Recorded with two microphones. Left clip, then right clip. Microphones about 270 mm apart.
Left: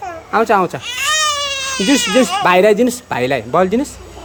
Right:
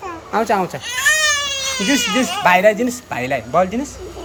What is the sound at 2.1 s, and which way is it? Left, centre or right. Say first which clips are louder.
Speech: left 3 dB; left.